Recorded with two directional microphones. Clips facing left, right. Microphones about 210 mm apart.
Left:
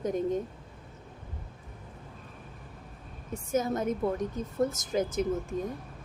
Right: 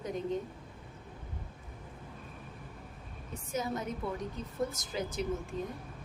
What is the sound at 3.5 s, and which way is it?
A woman's voice, 50° left (ahead or behind).